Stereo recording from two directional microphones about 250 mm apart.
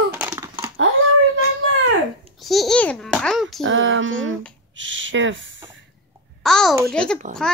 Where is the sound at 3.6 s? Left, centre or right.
Right.